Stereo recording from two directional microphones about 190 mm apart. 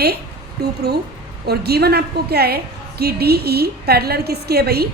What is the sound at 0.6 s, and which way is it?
A woman's voice, 60° right (ahead or behind).